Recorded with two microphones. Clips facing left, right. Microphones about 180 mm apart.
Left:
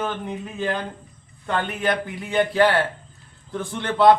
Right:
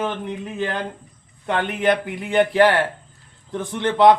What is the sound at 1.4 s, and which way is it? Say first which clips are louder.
Speech: right 4 dB; 20° right (ahead or behind).